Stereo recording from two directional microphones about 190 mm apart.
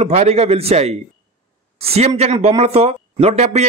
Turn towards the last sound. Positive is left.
turn(degrees=-35)  # may be behind; listen again after turning